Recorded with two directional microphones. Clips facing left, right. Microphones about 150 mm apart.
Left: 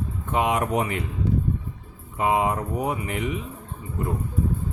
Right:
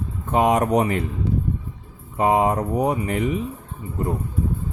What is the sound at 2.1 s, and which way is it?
Speech, 40° right (ahead or behind).